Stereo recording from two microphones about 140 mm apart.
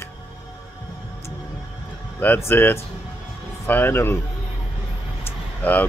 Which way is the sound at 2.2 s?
15° left (ahead or behind).